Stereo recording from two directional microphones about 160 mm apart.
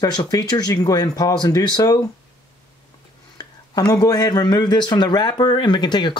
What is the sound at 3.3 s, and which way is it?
Speech, 25° left (ahead or behind).